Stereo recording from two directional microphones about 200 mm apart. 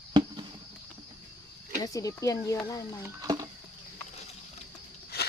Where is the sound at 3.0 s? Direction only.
20° right (ahead or behind).